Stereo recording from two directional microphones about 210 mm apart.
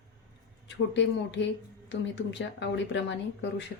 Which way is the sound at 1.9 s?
55° left (ahead or behind).